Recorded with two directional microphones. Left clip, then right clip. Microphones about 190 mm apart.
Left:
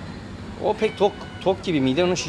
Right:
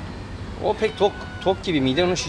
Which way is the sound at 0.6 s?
15° left (ahead or behind).